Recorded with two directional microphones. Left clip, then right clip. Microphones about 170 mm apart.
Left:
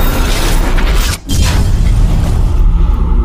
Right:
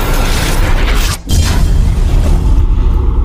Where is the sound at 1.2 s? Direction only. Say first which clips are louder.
Even; centre (ahead or behind).